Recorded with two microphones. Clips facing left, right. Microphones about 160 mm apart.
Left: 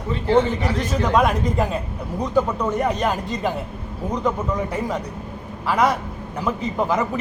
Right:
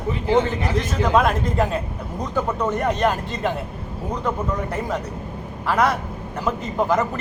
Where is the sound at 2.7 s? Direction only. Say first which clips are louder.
Right 1 dB; 10° left (ahead or behind).